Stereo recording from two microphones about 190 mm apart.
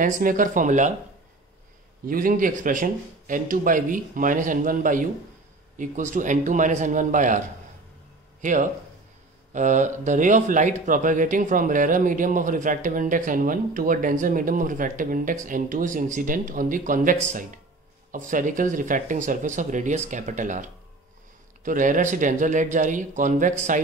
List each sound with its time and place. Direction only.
0.0 s speech: 45° right (ahead or behind)
2.0 s speech: 45° right (ahead or behind)